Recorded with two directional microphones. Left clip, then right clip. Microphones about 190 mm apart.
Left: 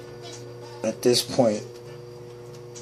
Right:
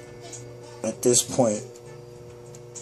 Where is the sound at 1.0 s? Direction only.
25° right (ahead or behind).